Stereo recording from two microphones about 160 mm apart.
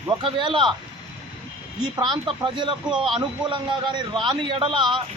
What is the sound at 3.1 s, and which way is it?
A man's voice, 30° right (ahead or behind).